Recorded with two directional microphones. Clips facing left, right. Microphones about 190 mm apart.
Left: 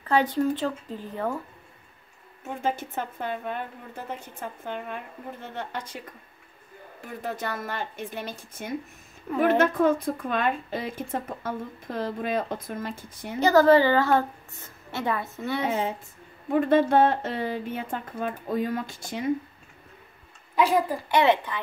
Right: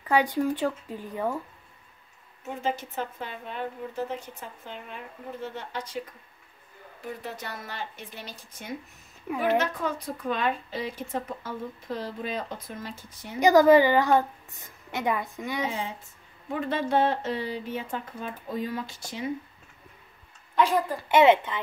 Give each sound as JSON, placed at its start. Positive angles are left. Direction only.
{"t": 0.0, "sound": "a woman's voice", "side_deg": -10}
{"t": 2.6, "sound": "speech", "side_deg": 50}
{"t": 7.0, "sound": "speech", "side_deg": 50}
{"t": 9.3, "sound": "a woman's voice", "side_deg": -10}
{"t": 9.6, "sound": "speech", "side_deg": 50}
{"t": 13.4, "sound": "a woman's voice", "side_deg": -15}
{"t": 16.5, "sound": "speech", "side_deg": 50}
{"t": 20.5, "sound": "speech", "side_deg": 10}
{"t": 21.1, "sound": "speech", "side_deg": -20}